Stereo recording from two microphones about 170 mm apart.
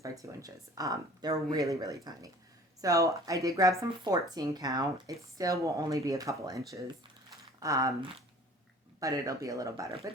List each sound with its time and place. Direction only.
0.0 s speech: 20° right (ahead or behind)
9.0 s speech: 20° right (ahead or behind)